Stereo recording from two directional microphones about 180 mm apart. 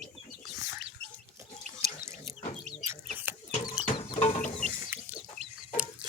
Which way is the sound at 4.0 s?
35° left (ahead or behind).